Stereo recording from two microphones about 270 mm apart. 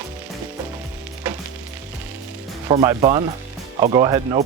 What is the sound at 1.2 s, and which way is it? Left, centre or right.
Frying, centre.